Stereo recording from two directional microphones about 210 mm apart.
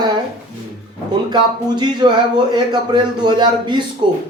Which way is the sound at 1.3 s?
20° right (ahead or behind).